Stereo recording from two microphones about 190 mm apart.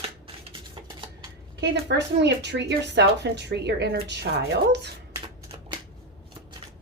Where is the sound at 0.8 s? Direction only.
20° right (ahead or behind).